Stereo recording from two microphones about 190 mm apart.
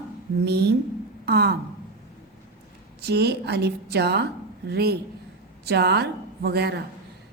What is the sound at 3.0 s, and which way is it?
A woman's voice, 60° right (ahead or behind).